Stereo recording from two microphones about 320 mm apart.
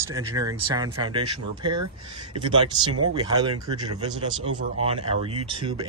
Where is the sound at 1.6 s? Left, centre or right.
Right.